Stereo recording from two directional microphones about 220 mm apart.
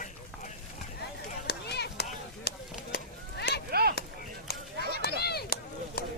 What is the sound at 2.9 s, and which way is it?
Honk, 50° left (ahead or behind).